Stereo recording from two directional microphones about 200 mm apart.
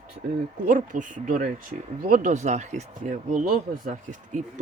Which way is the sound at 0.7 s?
40° right (ahead or behind).